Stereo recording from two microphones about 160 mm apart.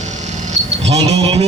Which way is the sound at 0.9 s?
40° right (ahead or behind).